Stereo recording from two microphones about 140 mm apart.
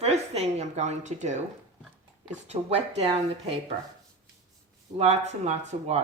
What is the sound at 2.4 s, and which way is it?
Speech, 50° right (ahead or behind).